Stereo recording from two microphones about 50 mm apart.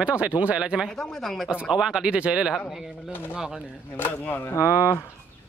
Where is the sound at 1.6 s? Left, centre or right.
Centre.